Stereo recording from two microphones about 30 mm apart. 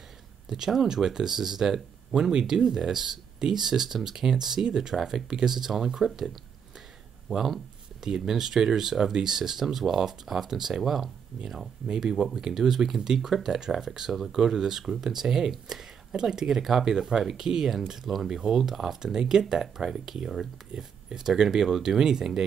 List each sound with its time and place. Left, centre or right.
0.5 s speech: right
8.0 s speech: centre
12.0 s speech: centre
14.3 s speech: centre
19.1 s speech: right